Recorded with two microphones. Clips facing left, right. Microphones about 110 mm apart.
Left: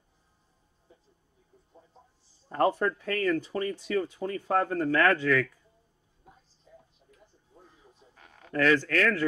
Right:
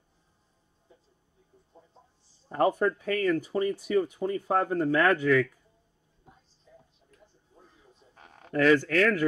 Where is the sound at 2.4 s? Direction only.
10° right (ahead or behind).